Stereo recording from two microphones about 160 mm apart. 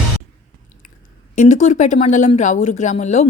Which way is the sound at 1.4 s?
50° left (ahead or behind).